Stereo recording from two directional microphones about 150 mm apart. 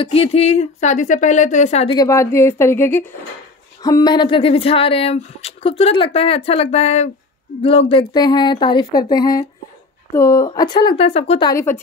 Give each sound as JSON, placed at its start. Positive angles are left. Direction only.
{"t": 0.0, "sound": "speech", "side_deg": 40}
{"t": 1.9, "sound": "a woman's voice", "side_deg": 20}
{"t": 3.8, "sound": "speech", "side_deg": 25}
{"t": 11.4, "sound": "a woman's voice", "side_deg": 20}